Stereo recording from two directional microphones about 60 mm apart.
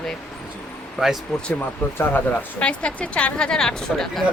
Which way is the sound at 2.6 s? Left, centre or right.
Centre.